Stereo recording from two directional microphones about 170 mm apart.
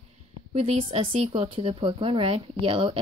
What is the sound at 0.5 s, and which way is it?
Speech, 35° right (ahead or behind).